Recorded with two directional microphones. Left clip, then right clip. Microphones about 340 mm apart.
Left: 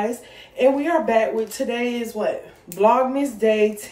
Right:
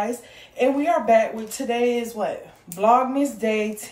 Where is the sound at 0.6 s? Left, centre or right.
Centre.